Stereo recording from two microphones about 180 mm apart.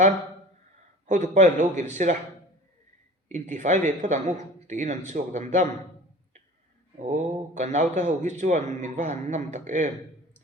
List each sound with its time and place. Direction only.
1.0 s a man's voice: 40° right (ahead or behind)
3.2 s a man's voice: 40° right (ahead or behind)
7.0 s a man's voice: 40° right (ahead or behind)